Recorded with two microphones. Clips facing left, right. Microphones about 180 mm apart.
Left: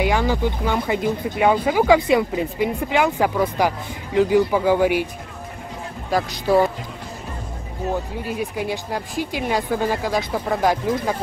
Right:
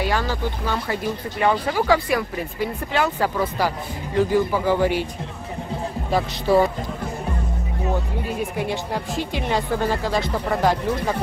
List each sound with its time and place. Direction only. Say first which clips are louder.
0.0 s speech: left 4 dB; 15° left (ahead or behind)
6.1 s speech: left 1 dB; centre (ahead or behind)
8.4 s speech: even; 5° left (ahead or behind)